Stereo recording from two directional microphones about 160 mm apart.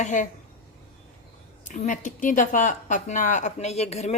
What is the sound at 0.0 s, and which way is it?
Speech, 50° left (ahead or behind).